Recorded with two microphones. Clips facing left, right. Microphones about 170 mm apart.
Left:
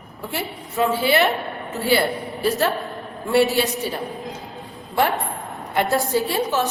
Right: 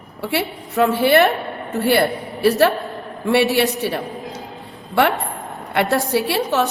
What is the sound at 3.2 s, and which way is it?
Speech, 70° right (ahead or behind).